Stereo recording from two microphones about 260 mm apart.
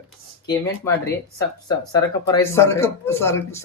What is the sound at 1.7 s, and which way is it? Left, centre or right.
Speech, centre.